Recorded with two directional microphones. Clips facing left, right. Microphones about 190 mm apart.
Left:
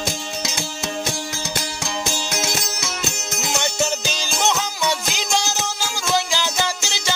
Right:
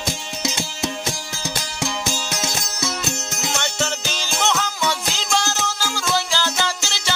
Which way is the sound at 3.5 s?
15° left (ahead or behind).